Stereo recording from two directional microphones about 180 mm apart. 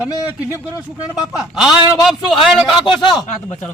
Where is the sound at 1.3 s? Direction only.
Centre (ahead or behind).